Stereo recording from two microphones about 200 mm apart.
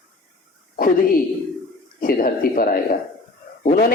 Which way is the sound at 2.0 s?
45° left (ahead or behind).